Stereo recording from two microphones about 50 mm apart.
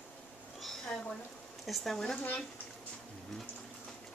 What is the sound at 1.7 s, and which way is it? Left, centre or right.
Speech, centre.